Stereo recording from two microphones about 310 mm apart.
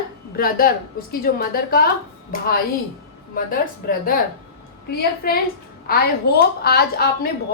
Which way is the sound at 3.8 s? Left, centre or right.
Left.